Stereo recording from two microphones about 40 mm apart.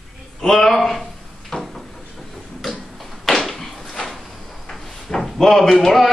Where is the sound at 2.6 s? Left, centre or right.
Centre.